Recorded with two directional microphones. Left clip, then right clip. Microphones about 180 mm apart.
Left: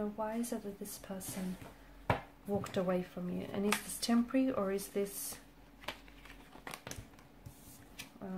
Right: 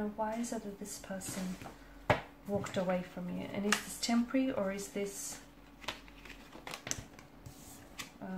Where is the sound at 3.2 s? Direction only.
30° left (ahead or behind).